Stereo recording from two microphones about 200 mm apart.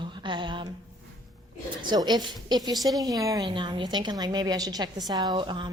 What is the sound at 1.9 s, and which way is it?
A woman's voice, 20° right (ahead or behind).